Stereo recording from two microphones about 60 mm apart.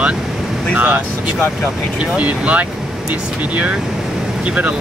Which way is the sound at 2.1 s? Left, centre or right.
Right.